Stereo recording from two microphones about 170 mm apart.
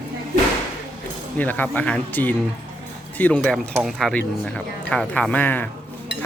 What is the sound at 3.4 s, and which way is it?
Speech, centre (ahead or behind).